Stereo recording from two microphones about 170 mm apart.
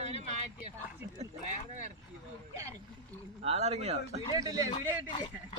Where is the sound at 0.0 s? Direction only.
40° right (ahead or behind).